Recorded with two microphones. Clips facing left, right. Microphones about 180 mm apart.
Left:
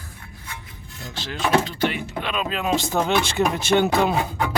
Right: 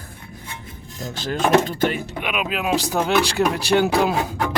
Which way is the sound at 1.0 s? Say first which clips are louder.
Right 5 dB; 45° right (ahead or behind).